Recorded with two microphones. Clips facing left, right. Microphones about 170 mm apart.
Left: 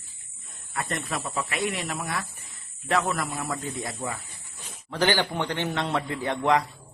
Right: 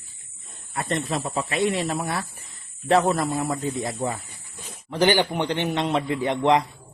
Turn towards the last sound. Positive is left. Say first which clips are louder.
# right 3 dB
turn(degrees=-20)  # may be behind; listen again after turning